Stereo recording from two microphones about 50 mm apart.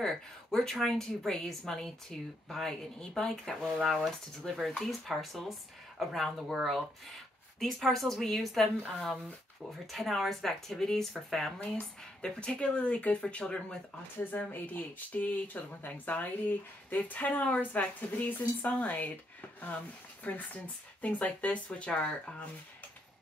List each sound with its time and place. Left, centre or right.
0.0 s speech: centre
14.3 s speech: left
20.2 s speech: left